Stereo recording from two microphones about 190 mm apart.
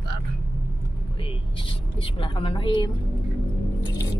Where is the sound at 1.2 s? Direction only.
25° left (ahead or behind).